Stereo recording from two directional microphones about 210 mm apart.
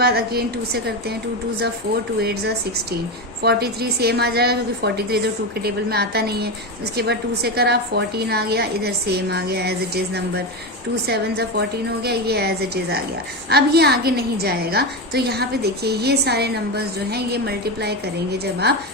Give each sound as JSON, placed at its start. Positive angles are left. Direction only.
{"t": 0.0, "sound": "a woman's voice", "side_deg": -50}
{"t": 2.2, "sound": "a woman's voice", "side_deg": -50}